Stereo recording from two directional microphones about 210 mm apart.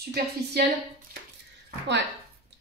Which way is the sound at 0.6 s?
50° right (ahead or behind).